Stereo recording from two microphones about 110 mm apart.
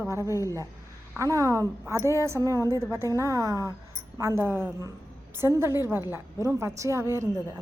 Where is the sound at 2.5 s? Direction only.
30° left (ahead or behind).